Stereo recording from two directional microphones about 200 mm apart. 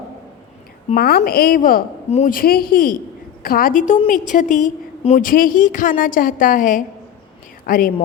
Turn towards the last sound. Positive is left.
turn(degrees=45)  # may be behind; listen again after turning